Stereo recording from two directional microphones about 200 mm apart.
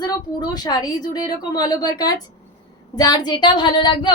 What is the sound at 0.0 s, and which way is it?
A woman's voice, 20° left (ahead or behind).